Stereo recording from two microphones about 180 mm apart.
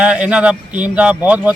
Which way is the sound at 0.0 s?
5° right (ahead or behind).